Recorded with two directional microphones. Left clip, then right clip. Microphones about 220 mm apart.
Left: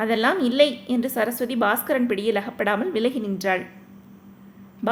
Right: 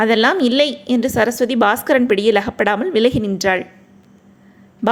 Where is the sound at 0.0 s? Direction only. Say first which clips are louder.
Right 7 dB; 30° right (ahead or behind).